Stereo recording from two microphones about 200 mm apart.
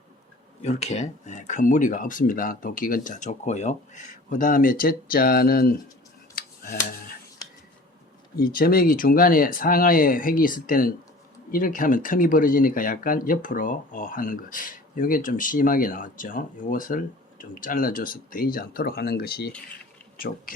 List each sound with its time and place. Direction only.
0.6 s speech: 35° left (ahead or behind); by 5.7 s 50° left (ahead or behind)
6.3 s a sound: 45° left (ahead or behind)
8.4 s speech: 45° left (ahead or behind)